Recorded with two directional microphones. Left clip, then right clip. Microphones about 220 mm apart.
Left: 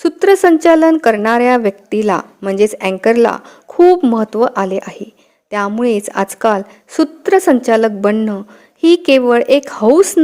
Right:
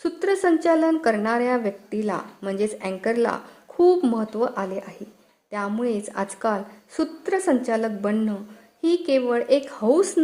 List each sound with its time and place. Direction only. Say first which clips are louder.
0.0 s a woman's voice: left 12 dB; 35° left (ahead or behind)